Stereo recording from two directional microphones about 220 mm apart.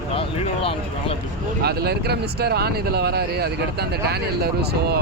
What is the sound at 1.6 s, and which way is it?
Speech, 45° right (ahead or behind).